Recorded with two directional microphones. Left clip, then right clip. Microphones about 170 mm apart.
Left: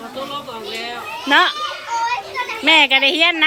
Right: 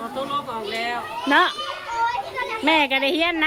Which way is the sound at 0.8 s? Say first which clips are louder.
Right 1 dB; 5° right (ahead or behind).